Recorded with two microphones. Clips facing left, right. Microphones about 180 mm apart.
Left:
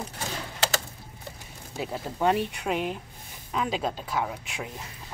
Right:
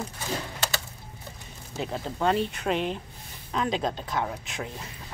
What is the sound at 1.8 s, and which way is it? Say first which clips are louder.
Speech: even; 10° left (ahead or behind).